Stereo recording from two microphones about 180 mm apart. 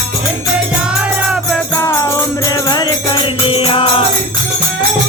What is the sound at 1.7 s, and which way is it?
Music, 15° left (ahead or behind).